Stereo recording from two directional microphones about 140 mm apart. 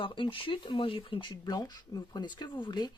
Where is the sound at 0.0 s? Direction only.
35° left (ahead or behind).